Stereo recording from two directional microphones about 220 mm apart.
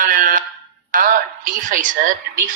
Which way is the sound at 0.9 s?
40° right (ahead or behind).